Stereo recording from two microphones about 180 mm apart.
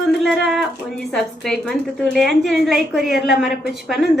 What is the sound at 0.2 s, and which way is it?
A woman's voice, centre (ahead or behind).